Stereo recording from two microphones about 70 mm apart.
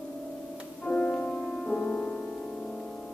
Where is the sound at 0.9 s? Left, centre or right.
Centre.